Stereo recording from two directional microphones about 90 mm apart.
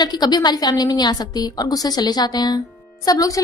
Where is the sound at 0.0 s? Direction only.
50° left (ahead or behind).